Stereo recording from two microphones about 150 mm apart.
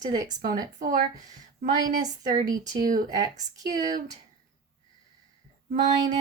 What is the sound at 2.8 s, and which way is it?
Speech, 65° right (ahead or behind).